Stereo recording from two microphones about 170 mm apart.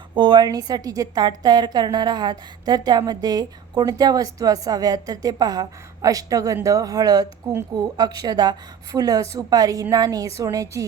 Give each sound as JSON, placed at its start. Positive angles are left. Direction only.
{"t": 0.1, "sound": "a woman's voice", "side_deg": -25}